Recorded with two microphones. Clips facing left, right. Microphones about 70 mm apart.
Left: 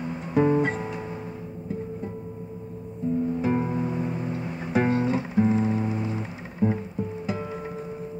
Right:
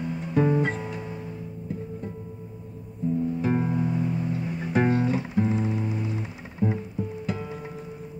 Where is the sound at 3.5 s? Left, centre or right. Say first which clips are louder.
Even; centre.